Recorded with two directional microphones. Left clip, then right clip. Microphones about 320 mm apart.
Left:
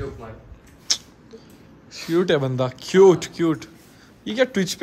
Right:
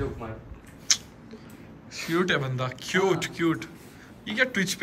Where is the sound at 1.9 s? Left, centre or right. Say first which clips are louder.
Left 5 dB; centre.